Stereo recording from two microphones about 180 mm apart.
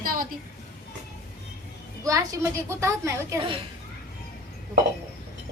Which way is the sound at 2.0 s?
20° right (ahead or behind).